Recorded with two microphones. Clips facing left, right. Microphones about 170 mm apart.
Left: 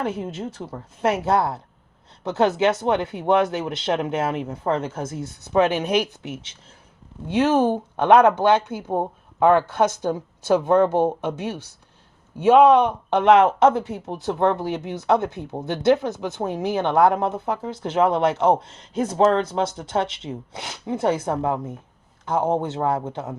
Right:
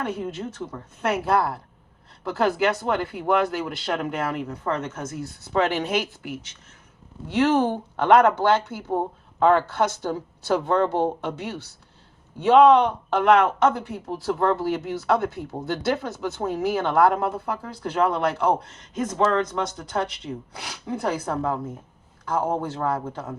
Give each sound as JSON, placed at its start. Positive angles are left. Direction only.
{"t": 0.6, "sound": "speech", "side_deg": 30}